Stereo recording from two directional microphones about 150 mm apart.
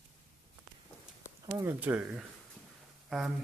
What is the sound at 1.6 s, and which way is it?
Speech, 10° right (ahead or behind).